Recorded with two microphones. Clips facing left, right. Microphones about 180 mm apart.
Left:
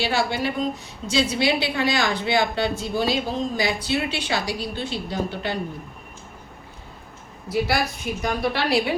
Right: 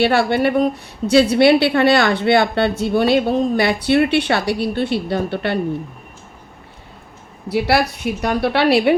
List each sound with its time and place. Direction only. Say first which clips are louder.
0.0 s a woman's voice: right 8 dB; 60° right (ahead or behind)
7.4 s a woman's voice: right 6 dB; 65° right (ahead or behind)